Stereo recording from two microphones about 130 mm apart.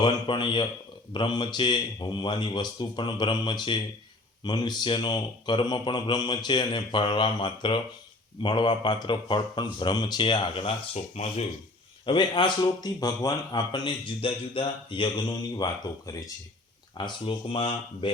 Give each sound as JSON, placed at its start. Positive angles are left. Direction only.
{"t": 0.0, "sound": "a man's voice", "side_deg": 40}
{"t": 10.9, "sound": "speech", "side_deg": 55}
{"t": 12.0, "sound": "a man's voice", "side_deg": 40}
{"t": 17.0, "sound": "a man's voice", "side_deg": 40}